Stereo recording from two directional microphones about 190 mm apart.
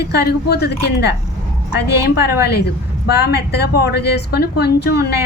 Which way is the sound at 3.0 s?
55° left (ahead or behind).